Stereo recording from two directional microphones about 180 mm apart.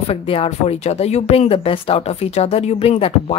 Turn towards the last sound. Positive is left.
turn(degrees=35)  # may be behind; listen again after turning